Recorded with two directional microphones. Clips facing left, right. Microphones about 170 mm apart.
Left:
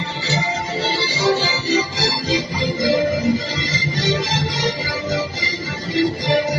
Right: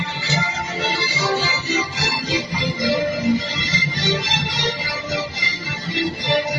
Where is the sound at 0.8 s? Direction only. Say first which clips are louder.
Left 1 dB; 30° left (ahead or behind).